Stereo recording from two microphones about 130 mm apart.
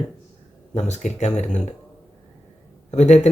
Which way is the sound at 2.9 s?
60° left (ahead or behind).